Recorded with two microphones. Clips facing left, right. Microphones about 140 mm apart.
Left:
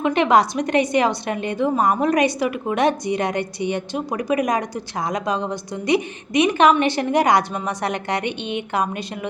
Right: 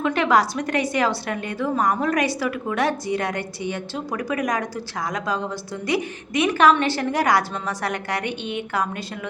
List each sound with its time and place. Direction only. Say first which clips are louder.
0.0 s a woman's voice: left 3 dB; 20° left (ahead or behind)